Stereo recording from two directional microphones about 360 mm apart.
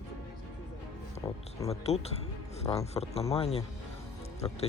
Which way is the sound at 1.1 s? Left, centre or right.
Centre.